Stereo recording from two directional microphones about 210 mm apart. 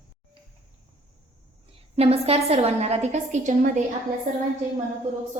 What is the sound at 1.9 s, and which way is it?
A woman's voice, 30° right (ahead or behind).